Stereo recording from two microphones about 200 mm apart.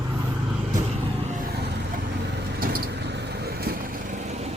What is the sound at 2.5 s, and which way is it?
Vehicle, 50° right (ahead or behind).